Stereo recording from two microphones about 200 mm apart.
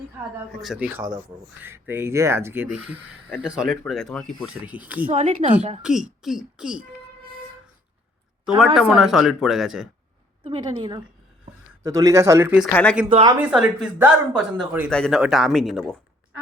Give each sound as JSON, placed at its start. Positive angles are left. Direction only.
{"t": 0.5, "sound": "speech", "side_deg": 0}
{"t": 5.1, "sound": "a woman's voice", "side_deg": -35}
{"t": 5.8, "sound": "speech", "side_deg": -5}
{"t": 8.5, "sound": "speech", "side_deg": 0}
{"t": 10.4, "sound": "a woman's voice", "side_deg": -25}
{"t": 12.7, "sound": "speech", "side_deg": 5}
{"t": 13.1, "sound": "a woman's voice", "side_deg": -25}
{"t": 13.4, "sound": "speech", "side_deg": -5}
{"t": 14.8, "sound": "speech", "side_deg": 5}